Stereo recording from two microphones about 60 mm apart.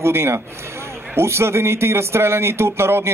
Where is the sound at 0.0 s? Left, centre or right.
Right.